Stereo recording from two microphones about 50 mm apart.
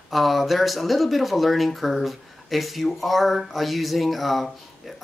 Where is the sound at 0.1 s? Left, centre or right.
Centre.